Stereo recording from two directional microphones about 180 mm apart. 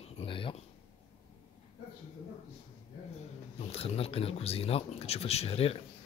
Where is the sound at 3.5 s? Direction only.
35° left (ahead or behind).